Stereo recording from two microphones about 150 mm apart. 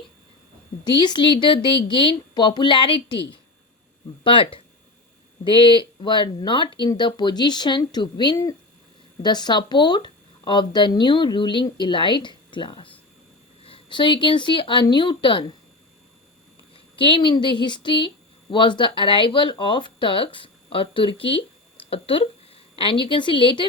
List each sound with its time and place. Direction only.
0.9 s speech: 30° left (ahead or behind)
5.5 s speech: 35° left (ahead or behind)
16.7 s speech: 35° left (ahead or behind)